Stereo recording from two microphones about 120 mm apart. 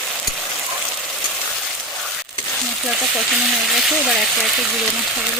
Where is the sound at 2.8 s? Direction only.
Centre (ahead or behind).